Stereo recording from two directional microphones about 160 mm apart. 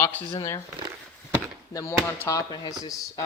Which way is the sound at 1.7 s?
20° left (ahead or behind).